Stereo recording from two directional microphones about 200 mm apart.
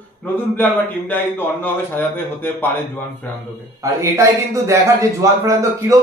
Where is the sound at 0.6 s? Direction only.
10° left (ahead or behind).